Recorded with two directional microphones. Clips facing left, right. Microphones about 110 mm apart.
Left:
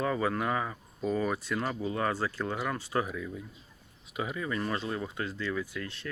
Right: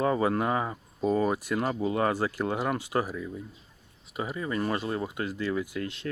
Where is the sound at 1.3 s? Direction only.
15° right (ahead or behind).